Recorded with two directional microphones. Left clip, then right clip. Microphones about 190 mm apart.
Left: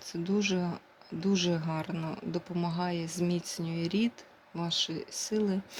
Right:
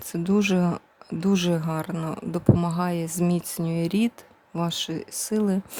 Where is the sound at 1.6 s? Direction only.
25° right (ahead or behind).